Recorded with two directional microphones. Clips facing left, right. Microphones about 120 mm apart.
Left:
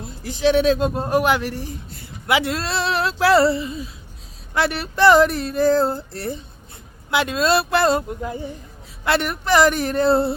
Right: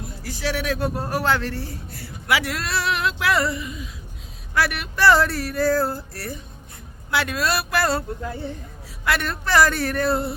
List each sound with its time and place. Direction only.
0.0 s speech: 20° left (ahead or behind)